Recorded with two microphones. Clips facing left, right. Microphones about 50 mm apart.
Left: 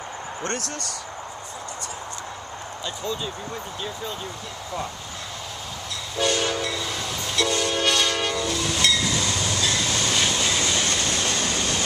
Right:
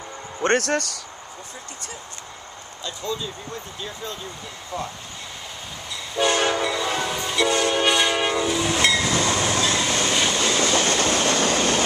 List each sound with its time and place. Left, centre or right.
0.4 s speech: right
3.1 s speech: centre
6.3 s train: right
6.6 s train: centre
9.1 s train: right
9.6 s train: right
10.2 s train: centre
10.7 s train: right
11.0 s vehicle: right